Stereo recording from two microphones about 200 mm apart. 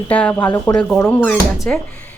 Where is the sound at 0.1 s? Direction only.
5° left (ahead or behind).